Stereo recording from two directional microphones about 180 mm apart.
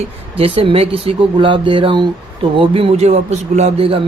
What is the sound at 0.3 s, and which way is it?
Speech, 30° right (ahead or behind).